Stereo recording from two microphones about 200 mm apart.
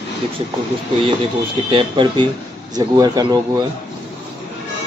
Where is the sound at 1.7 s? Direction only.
25° right (ahead or behind).